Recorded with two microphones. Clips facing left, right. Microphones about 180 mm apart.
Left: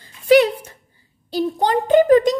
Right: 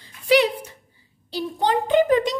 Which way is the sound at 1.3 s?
45° left (ahead or behind).